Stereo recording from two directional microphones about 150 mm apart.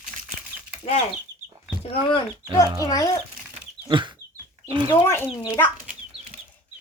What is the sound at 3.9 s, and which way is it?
Chicken, 35° right (ahead or behind).